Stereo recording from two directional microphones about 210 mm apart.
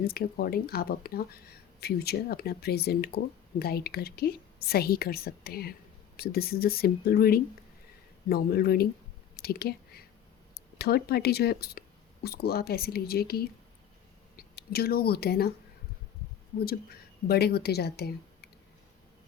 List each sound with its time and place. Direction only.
0.0 s speech: 45° left (ahead or behind)
9.3 s whispering: 50° left (ahead or behind)
10.5 s speech: 50° left (ahead or behind)
17.2 s speech: 50° left (ahead or behind)